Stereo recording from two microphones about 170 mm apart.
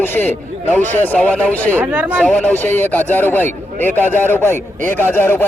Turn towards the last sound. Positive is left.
turn(degrees=10)  # may be behind; listen again after turning